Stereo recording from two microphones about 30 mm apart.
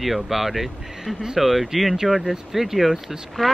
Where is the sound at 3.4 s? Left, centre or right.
Centre.